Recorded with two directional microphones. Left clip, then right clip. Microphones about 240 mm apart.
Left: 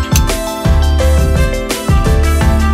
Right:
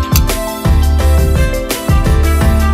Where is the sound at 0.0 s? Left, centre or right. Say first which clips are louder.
Even; centre.